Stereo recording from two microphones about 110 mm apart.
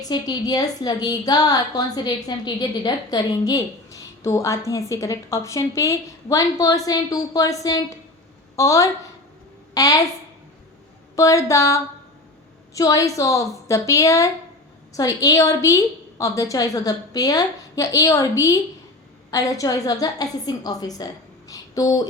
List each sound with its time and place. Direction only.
0.0 s a woman's voice: 35° left (ahead or behind)
11.2 s a woman's voice: 30° left (ahead or behind)